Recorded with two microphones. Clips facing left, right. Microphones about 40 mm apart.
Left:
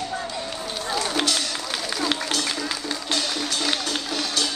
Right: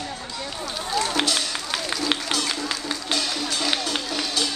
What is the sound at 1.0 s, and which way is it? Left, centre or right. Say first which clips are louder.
Run: right 1 dB; centre.